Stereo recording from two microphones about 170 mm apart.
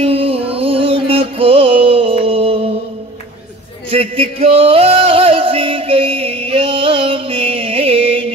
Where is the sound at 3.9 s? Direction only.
35° right (ahead or behind).